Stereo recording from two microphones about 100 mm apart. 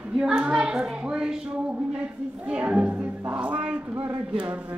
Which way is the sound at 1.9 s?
10° right (ahead or behind).